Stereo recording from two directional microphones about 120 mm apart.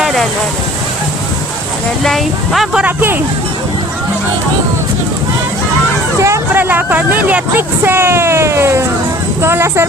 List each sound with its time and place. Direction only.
2.0 s speech: centre (ahead or behind)
2.8 s speech: 15° right (ahead or behind)
6.1 s speech: 20° right (ahead or behind)